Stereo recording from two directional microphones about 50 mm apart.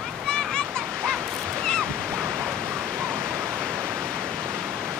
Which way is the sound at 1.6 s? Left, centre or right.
Centre.